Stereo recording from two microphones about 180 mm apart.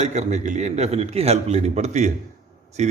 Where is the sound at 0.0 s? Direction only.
40° right (ahead or behind).